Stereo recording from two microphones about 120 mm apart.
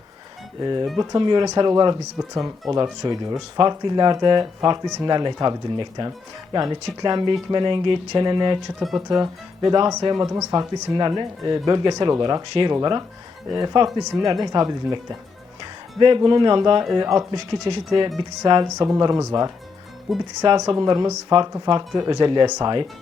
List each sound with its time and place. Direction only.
0.6 s speech: 35° right (ahead or behind)
8.8 s speech: centre (ahead or behind)
9.0 s speech: 30° right (ahead or behind)
16.0 s a woman's voice: 40° right (ahead or behind)
18.8 s speech: 30° right (ahead or behind)
20.1 s speech: centre (ahead or behind)
20.4 s speech: 35° right (ahead or behind)